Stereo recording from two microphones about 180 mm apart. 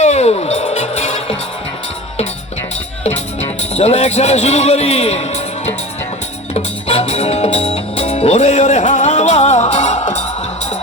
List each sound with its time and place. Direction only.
0.0 s music: 40° left (ahead or behind)
3.6 s a man's voice: 35° left (ahead or behind)
6.5 s music: 35° left (ahead or behind)